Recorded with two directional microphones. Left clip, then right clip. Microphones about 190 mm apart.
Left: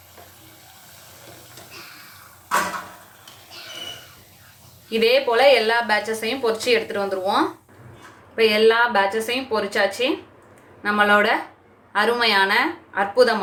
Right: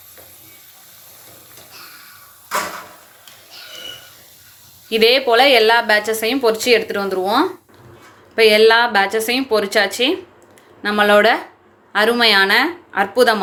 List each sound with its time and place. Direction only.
4.9 s a woman's voice: 40° right (ahead or behind)